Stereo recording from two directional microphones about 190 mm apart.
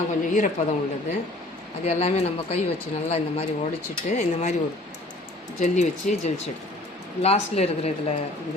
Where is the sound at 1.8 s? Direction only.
35° left (ahead or behind).